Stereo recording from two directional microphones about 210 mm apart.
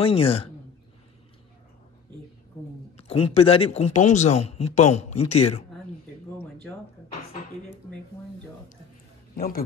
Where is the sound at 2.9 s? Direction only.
30° left (ahead or behind).